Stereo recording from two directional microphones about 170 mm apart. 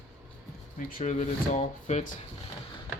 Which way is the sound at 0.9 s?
50° left (ahead or behind).